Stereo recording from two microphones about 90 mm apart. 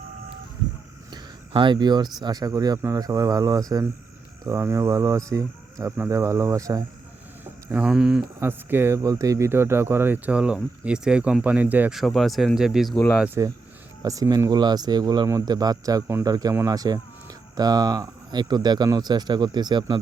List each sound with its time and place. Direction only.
1.1 s a sound: 60° right (ahead or behind)
2.2 s speech: 45° right (ahead or behind)
7.8 s speech: 10° right (ahead or behind)
8.4 s speech: 25° right (ahead or behind)
11.9 s speech: centre (ahead or behind)
13.4 s speech: 35° right (ahead or behind); by 15.3 s 50° right (ahead or behind)
15.3 s speech: 40° right (ahead or behind)